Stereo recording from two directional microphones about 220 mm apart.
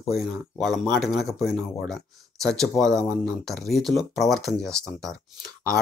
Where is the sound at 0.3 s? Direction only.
Centre (ahead or behind).